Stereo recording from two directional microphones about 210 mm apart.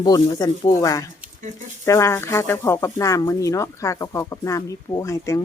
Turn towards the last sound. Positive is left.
turn(degrees=15)  # may be behind; listen again after turning